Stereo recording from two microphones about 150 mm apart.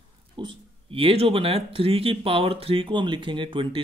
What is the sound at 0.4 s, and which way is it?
Speech, 35° right (ahead or behind).